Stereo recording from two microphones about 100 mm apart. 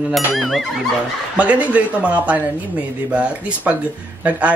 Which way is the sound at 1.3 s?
15° right (ahead or behind).